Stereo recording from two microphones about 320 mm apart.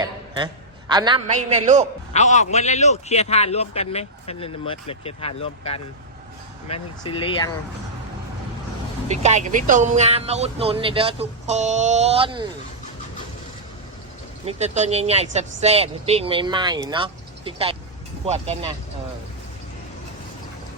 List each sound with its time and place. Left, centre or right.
0.0 s a man's voice: centre
2.1 s a man's voice: left
9.0 s speech: right
14.4 s speech: right